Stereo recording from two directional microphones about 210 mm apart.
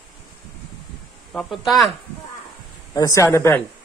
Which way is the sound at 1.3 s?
Centre (ahead or behind).